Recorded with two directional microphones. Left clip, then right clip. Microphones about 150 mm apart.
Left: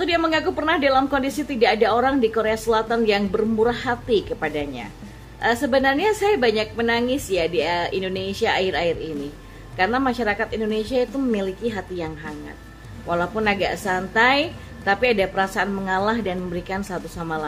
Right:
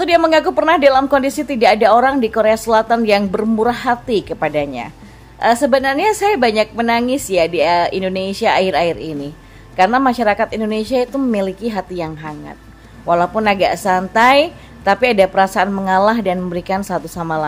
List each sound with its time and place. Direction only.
0.0 s a woman's voice: 40° right (ahead or behind)